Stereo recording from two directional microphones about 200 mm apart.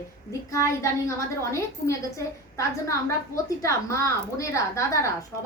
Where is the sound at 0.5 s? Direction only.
15° left (ahead or behind).